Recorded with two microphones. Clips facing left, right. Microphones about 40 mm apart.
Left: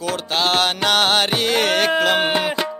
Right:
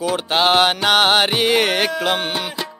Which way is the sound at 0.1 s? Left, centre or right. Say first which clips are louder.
Right 3 dB; centre.